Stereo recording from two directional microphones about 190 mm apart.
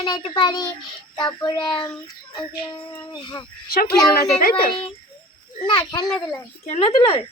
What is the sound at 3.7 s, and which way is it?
A child's voice, 55° left (ahead or behind).